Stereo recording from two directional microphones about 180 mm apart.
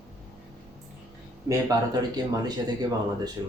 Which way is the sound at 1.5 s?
20° right (ahead or behind).